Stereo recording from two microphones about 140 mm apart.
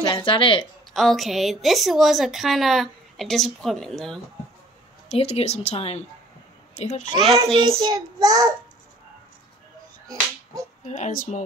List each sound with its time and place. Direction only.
0.0 s speech: 35° left (ahead or behind)
0.9 s a woman's voice: centre (ahead or behind)
5.1 s speech: 50° left (ahead or behind)
7.5 s child singing: 35° right (ahead or behind)
10.9 s speech: 60° left (ahead or behind)